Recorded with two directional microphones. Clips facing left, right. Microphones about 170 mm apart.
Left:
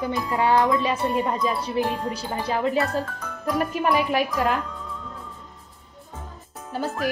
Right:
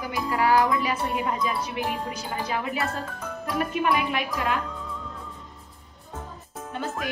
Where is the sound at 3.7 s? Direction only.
40° left (ahead or behind).